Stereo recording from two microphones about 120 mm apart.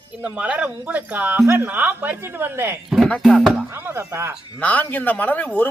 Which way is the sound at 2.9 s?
Centre (ahead or behind).